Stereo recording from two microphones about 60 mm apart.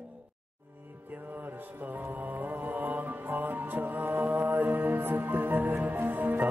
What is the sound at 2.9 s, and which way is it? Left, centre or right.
Music, right.